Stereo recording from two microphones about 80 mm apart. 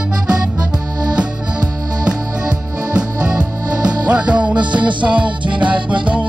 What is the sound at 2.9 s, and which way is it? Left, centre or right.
Music, centre.